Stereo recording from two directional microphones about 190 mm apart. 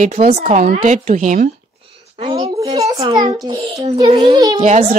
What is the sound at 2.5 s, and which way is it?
A child's voice, 15° right (ahead or behind).